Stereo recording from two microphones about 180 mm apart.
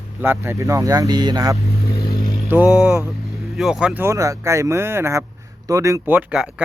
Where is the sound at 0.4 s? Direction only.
15° right (ahead or behind).